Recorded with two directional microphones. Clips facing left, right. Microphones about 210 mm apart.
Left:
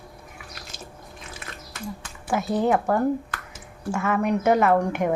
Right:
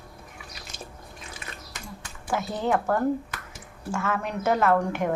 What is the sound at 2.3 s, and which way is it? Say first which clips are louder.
A woman's voice: left 4 dB; 15° left (ahead or behind).